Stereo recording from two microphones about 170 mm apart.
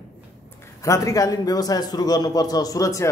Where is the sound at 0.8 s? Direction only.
20° left (ahead or behind).